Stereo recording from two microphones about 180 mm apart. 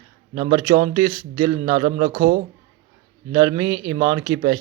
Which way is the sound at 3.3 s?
25° right (ahead or behind).